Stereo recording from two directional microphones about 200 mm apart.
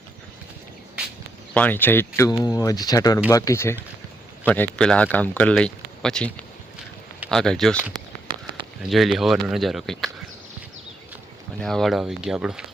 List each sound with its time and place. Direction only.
1.5 s speech: 10° left (ahead or behind)
11.6 s speech: centre (ahead or behind)